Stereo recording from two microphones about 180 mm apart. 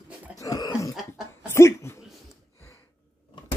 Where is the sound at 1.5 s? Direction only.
15° left (ahead or behind).